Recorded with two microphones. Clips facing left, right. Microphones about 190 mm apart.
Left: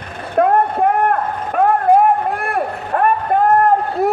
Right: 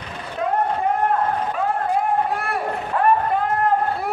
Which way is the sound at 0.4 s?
60° left (ahead or behind).